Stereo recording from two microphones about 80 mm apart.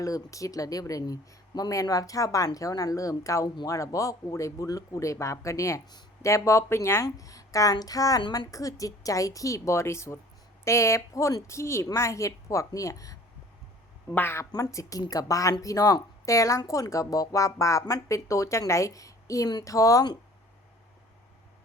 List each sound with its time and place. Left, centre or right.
0.0 s speech: left
7.0 s speech: left
14.1 s a woman's voice: left
14.5 s a woman's voice: left